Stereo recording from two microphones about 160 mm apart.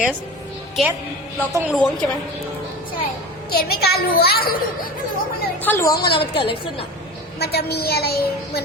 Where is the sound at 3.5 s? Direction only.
70° left (ahead or behind).